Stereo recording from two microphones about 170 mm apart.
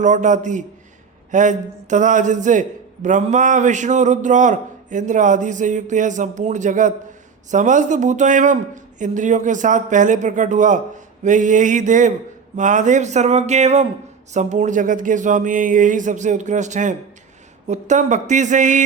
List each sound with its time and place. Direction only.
0.0 s a man's voice: 45° right (ahead or behind)